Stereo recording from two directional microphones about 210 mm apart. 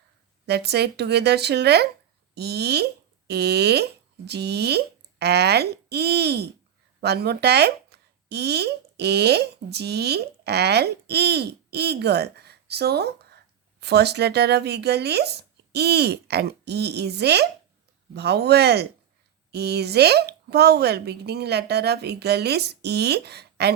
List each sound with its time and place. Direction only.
0.4 s speech: 50° right (ahead or behind)